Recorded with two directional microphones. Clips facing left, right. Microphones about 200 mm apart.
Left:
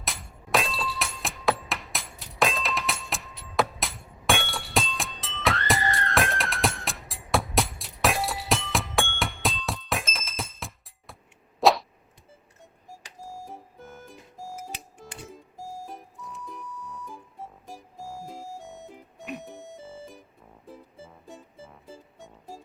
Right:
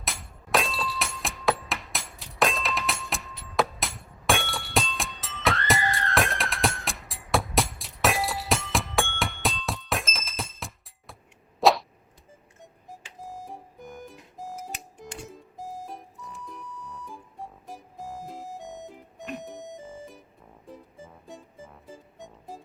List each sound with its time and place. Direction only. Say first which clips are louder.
0.0 s glass: even; centre (ahead or behind)
11.6 s a sound: even; centre (ahead or behind)
13.7 s music: right 3 dB; 15° right (ahead or behind)
15.9 s music: even; centre (ahead or behind)
17.9 s music: right 1 dB; 20° right (ahead or behind)
22.2 s music: right 3 dB; 20° right (ahead or behind)